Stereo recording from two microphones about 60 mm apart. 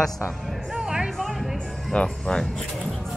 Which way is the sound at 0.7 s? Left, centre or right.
Centre.